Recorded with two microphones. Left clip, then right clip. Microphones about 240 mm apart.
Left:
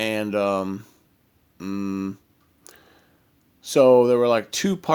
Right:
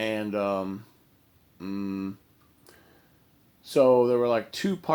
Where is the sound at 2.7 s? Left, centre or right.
Left.